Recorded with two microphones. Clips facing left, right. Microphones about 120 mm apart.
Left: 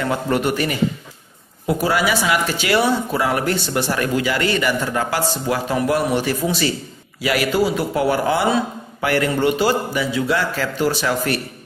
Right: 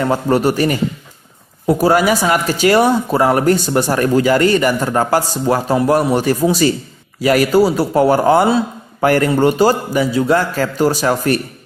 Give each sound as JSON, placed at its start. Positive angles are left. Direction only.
{"t": 0.0, "sound": "a man's voice", "side_deg": -35}